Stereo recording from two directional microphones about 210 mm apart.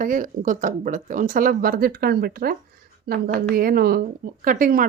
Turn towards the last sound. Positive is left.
turn(degrees=-40)  # may be behind; listen again after turning